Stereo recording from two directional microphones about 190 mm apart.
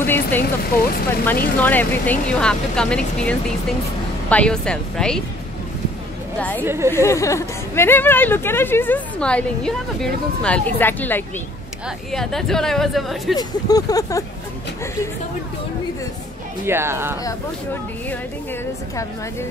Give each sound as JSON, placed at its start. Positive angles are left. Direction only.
{"t": 0.0, "sound": "vehicle", "side_deg": 10}
{"t": 0.4, "sound": "speech", "side_deg": 55}
{"t": 1.6, "sound": "speech", "side_deg": 10}
{"t": 6.6, "sound": "speech", "side_deg": -15}
{"t": 6.9, "sound": "speech", "side_deg": 15}
{"t": 13.4, "sound": "speech", "side_deg": 20}
{"t": 16.6, "sound": "speech", "side_deg": -15}